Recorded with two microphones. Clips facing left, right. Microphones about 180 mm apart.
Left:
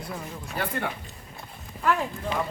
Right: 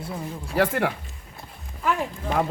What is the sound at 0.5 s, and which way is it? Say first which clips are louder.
Speech: right 8 dB; 90° right.